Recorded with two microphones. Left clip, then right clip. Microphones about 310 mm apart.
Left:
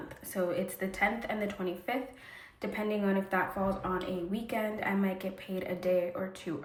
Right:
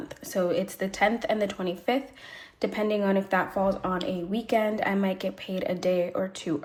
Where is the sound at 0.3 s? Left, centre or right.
Centre.